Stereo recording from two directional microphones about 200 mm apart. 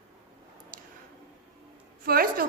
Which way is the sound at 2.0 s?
45° right (ahead or behind).